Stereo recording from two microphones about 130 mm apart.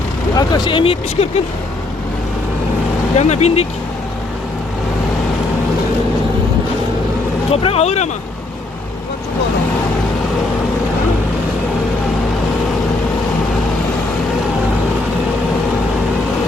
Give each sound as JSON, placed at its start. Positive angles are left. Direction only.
{"t": 0.3, "sound": "speech", "side_deg": 30}
{"t": 3.2, "sound": "speech", "side_deg": 55}
{"t": 7.5, "sound": "speech", "side_deg": 50}